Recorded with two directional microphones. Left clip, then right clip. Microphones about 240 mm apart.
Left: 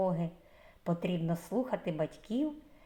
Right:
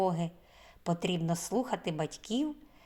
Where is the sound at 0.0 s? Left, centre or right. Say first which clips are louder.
Right 2 dB; right.